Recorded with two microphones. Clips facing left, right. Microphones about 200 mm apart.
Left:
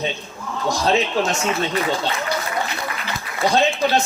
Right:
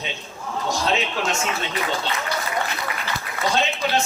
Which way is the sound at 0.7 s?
35° left (ahead or behind).